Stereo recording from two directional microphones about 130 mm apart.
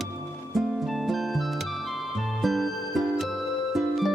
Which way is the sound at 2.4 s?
Centre (ahead or behind).